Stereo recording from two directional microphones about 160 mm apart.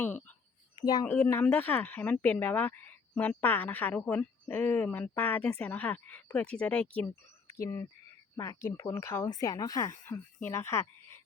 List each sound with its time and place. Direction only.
0.0 s speech: 10° left (ahead or behind)
0.8 s a woman's voice: 25° left (ahead or behind)
1.0 s speech: 10° left (ahead or behind)